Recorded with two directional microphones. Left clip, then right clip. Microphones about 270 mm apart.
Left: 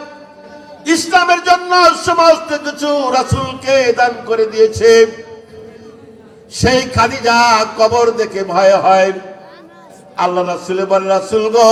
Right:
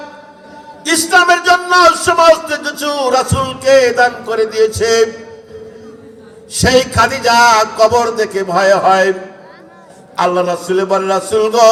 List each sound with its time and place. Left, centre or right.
0.9 s a man's voice: right
6.5 s a man's voice: right
10.2 s a man's voice: right